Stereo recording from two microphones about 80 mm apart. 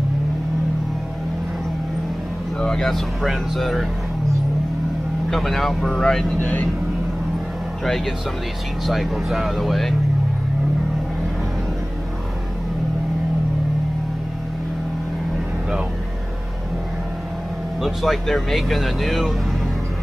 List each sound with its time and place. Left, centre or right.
2.6 s speech: centre
5.3 s speech: centre
6.4 s speech: centre
7.8 s speech: centre
17.7 s speech: centre